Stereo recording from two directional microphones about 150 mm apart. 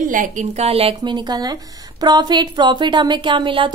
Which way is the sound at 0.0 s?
65° right (ahead or behind).